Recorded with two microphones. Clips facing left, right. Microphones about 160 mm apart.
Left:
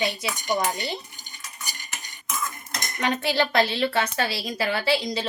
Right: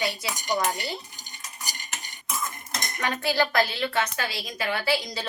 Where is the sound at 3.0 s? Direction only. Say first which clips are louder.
Left 2 dB; 20° left (ahead or behind).